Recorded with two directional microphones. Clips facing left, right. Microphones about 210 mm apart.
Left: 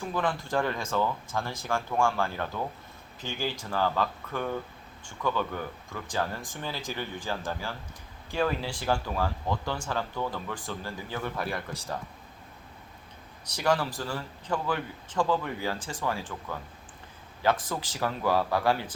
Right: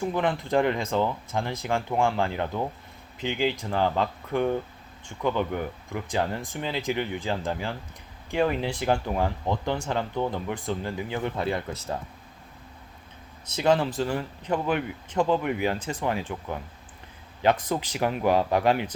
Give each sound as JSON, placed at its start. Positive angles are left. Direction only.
{"t": 0.0, "sound": "speech", "side_deg": -20}
{"t": 13.5, "sound": "speech", "side_deg": -20}
{"t": 17.4, "sound": "speech", "side_deg": -20}